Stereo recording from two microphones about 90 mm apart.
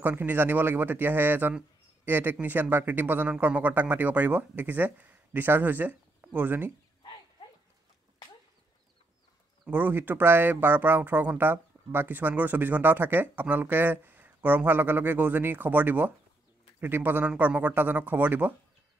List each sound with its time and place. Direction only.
0.0 s speech: 20° right (ahead or behind)
9.7 s speech: 20° right (ahead or behind)